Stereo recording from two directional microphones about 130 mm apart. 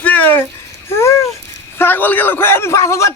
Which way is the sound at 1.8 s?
15° left (ahead or behind).